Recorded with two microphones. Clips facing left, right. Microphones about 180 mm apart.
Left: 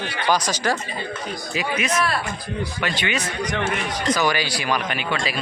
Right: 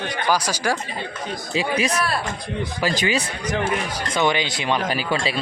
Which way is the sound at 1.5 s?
35° right (ahead or behind).